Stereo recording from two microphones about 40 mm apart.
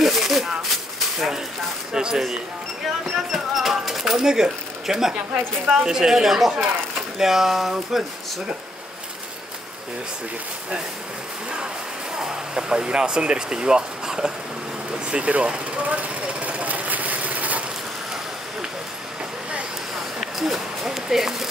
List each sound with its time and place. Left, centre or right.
0.0 s a sound: centre
3.2 s bird: centre
5.7 s speech: centre
12.2 s speech: centre
15.0 s vehicle: right
20.2 s a sound: centre